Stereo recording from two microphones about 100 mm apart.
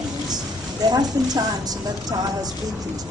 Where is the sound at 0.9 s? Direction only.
40° right (ahead or behind).